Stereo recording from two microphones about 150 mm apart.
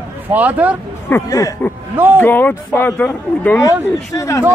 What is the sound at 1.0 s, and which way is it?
A man's voice, 20° left (ahead or behind).